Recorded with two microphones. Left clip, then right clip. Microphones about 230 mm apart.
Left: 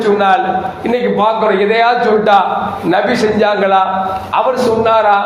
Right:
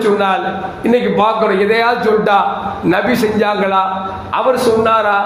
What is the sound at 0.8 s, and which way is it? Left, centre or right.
A man's voice, right.